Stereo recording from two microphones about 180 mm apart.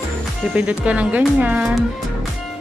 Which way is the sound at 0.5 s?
5° right (ahead or behind).